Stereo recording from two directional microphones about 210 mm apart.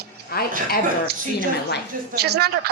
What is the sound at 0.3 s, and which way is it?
Speech, 45° left (ahead or behind).